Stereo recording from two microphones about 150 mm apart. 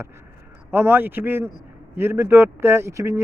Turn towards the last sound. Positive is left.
turn(degrees=-20)  # may be behind; listen again after turning